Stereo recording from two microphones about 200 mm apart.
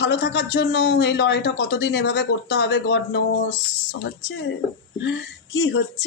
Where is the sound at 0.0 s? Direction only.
60° left (ahead or behind).